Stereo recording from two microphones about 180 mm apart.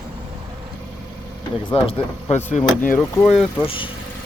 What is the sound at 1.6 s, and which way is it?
Speech, 30° left (ahead or behind).